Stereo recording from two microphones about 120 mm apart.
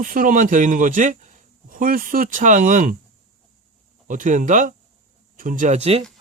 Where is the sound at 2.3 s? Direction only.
90° right.